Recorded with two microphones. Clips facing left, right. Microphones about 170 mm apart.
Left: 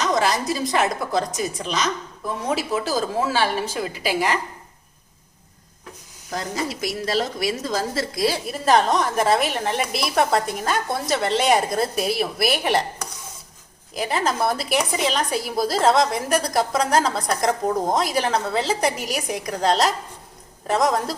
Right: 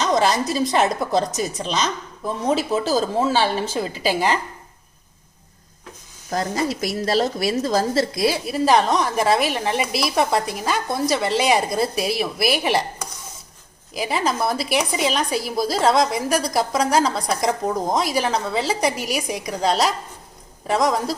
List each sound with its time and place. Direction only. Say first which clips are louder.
0.2 s a woman's voice: right 2 dB; 25° right (ahead or behind)
6.3 s a woman's voice: right 4 dB; 40° right (ahead or behind)
8.1 s a woman's voice: right 2 dB; 15° right (ahead or behind)
8.4 s a woman's voice: right 1 dB; centre (ahead or behind)
13.9 s a woman's voice: right 1 dB; 5° right (ahead or behind)